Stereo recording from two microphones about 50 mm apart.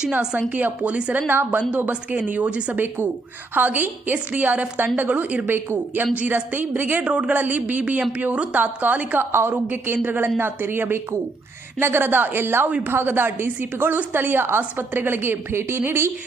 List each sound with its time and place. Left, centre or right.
0.1 s a woman's voice: right
1.3 s speech: right
1.7 s a woman's voice: right
2.7 s a woman's voice: right
5.5 s a woman's voice: right
7.0 s a woman's voice: right
9.3 s speech: right
9.6 s speech: right